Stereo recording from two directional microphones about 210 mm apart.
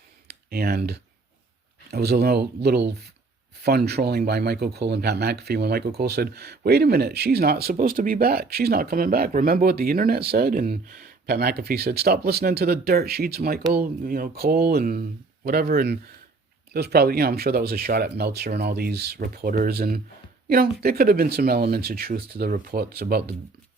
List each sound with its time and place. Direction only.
0.3 s speech: 50° right (ahead or behind)